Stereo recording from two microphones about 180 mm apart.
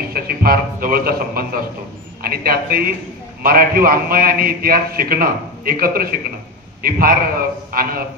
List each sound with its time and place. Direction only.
0.1 s a man's voice: 55° right (ahead or behind)